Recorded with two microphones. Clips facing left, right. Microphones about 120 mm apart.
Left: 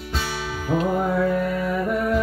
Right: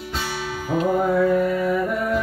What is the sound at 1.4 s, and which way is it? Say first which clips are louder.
Music: right 3 dB; centre (ahead or behind).